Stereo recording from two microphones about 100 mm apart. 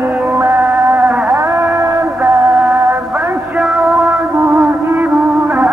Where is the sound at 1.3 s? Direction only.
30° right (ahead or behind).